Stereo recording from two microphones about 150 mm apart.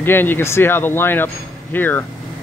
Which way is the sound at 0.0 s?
15° left (ahead or behind).